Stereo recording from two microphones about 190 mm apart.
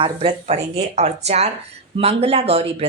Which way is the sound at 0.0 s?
30° right (ahead or behind).